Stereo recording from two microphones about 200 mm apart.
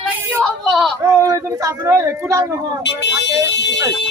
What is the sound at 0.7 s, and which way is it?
Speech, centre (ahead or behind).